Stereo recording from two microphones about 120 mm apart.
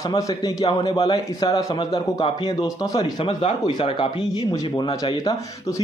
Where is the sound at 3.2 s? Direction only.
50° left (ahead or behind).